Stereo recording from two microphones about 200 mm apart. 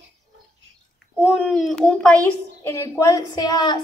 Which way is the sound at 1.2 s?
Centre (ahead or behind).